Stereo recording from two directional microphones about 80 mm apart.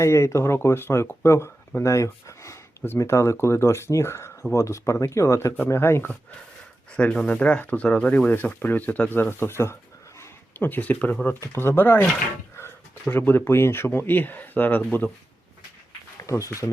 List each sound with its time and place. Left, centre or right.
0.0 s speech: left
6.9 s speech: centre
11.3 s speech: left
16.2 s speech: left